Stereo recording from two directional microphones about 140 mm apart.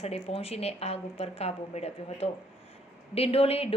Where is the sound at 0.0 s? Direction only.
50° left (ahead or behind).